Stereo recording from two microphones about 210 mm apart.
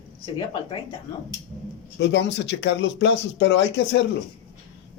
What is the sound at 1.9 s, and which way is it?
Speech, 55° left (ahead or behind).